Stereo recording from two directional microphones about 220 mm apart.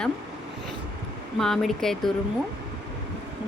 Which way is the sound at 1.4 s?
Centre (ahead or behind).